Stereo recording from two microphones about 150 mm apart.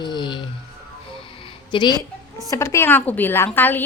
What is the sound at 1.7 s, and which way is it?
A woman's voice, 30° left (ahead or behind).